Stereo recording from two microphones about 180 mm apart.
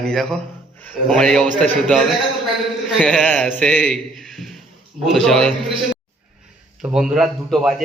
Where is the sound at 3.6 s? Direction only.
5° left (ahead or behind).